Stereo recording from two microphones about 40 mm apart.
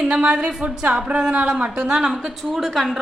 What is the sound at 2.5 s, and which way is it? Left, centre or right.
Speech, centre.